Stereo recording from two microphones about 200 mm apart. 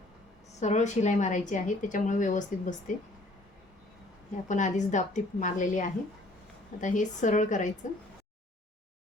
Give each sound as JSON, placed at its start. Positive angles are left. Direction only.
{"t": 0.6, "sound": "a woman's voice", "side_deg": 35}
{"t": 4.4, "sound": "a woman's voice", "side_deg": 40}